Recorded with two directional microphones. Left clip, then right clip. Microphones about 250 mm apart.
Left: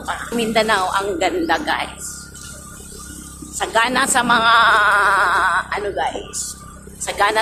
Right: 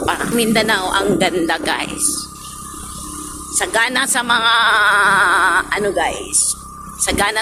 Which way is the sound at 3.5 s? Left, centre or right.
Centre.